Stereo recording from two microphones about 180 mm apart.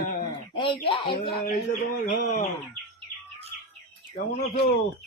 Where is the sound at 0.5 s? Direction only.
25° left (ahead or behind).